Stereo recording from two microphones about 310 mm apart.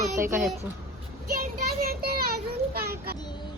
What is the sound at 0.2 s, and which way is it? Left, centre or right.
Speech, centre.